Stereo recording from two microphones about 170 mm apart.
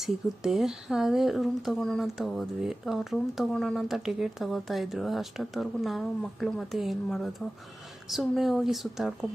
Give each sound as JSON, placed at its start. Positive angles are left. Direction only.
{"t": 0.0, "sound": "speech", "side_deg": 0}